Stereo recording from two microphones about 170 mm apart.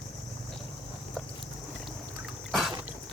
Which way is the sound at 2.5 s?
Centre (ahead or behind).